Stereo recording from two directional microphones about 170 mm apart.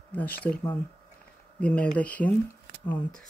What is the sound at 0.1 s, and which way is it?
Speech, 10° left (ahead or behind).